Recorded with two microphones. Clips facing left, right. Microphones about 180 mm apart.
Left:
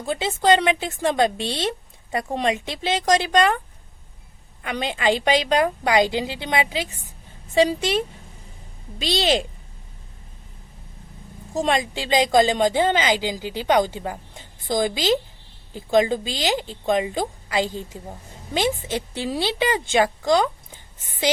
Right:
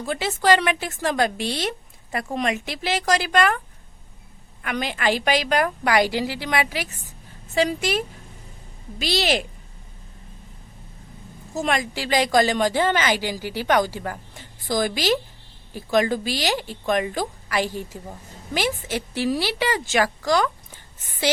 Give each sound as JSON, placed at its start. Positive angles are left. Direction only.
{"t": 0.0, "sound": "speech", "side_deg": 25}
{"t": 4.6, "sound": "speech", "side_deg": 25}
{"t": 11.5, "sound": "speech", "side_deg": 30}